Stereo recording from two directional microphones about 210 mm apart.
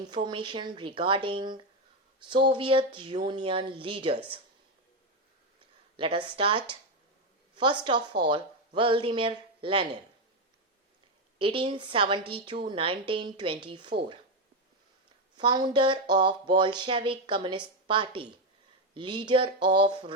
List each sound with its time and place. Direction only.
0.3 s a woman's voice: 20° right (ahead or behind)
6.0 s a woman's voice: 25° right (ahead or behind)
7.5 s a sound: 20° right (ahead or behind)
7.9 s a woman's voice: 20° right (ahead or behind)
11.3 s a woman's voice: 25° right (ahead or behind)
15.4 s a woman's voice: 20° right (ahead or behind)